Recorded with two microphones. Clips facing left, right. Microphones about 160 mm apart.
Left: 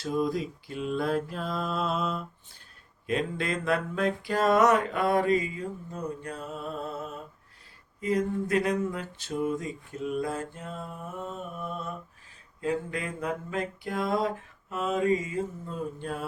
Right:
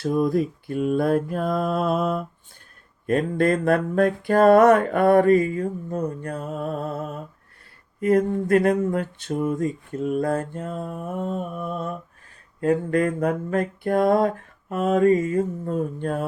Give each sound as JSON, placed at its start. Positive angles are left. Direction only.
{"t": 0.0, "sound": "mantra", "side_deg": -55}